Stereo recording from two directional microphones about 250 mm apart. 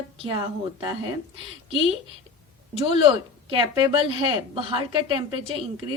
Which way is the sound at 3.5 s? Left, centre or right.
Centre.